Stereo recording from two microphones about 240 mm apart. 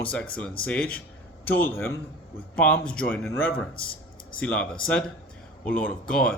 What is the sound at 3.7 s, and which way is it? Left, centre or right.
Speech, left.